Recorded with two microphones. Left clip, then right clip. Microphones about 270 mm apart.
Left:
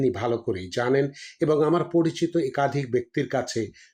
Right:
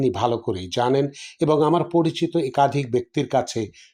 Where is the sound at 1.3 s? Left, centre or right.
Centre.